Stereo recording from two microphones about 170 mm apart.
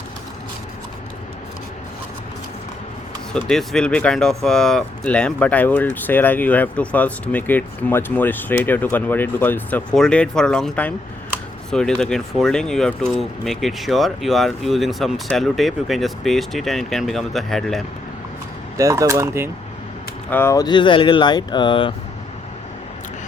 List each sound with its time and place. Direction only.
3.3 s speech: 5° left (ahead or behind)
18.8 s speech: 20° right (ahead or behind)
20.3 s speech: 15° left (ahead or behind)